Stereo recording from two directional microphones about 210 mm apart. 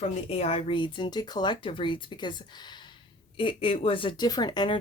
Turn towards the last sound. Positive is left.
turn(degrees=20)  # may be behind; listen again after turning